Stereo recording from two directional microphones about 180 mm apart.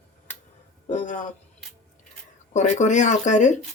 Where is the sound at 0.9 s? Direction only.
45° left (ahead or behind).